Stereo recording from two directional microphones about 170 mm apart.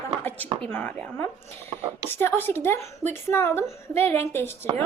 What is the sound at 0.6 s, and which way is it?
A woman's voice, 5° left (ahead or behind).